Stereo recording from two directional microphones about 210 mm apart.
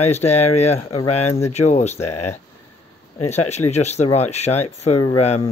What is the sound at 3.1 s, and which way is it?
Speech, 30° left (ahead or behind).